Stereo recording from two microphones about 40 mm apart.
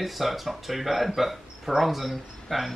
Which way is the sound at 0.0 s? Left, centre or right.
Centre.